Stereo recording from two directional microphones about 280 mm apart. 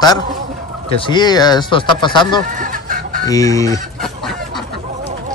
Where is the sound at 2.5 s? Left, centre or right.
Right.